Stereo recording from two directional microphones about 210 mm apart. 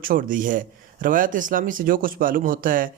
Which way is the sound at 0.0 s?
40° right (ahead or behind).